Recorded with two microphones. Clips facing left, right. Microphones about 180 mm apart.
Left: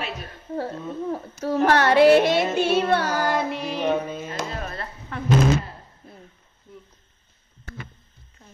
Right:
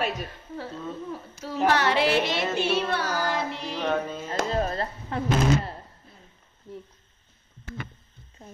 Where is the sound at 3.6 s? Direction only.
15° left (ahead or behind).